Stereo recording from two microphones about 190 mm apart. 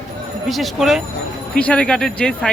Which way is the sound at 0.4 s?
Centre (ahead or behind).